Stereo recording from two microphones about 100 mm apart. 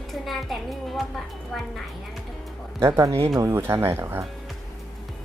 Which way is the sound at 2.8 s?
30° right (ahead or behind).